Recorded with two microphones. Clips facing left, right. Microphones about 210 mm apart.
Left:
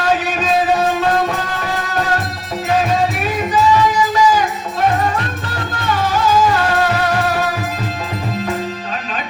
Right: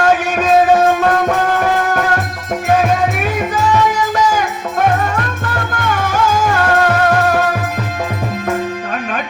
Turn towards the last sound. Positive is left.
turn(degrees=-50)  # may be behind; listen again after turning